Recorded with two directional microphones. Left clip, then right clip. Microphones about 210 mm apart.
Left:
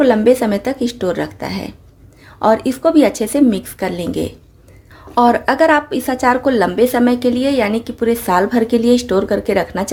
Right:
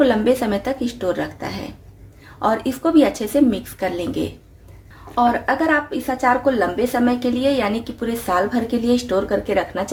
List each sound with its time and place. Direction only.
0.0 s a woman's voice: 35° left (ahead or behind)